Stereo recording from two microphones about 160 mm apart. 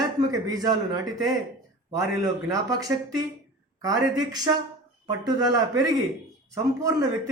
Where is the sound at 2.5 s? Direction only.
20° right (ahead or behind).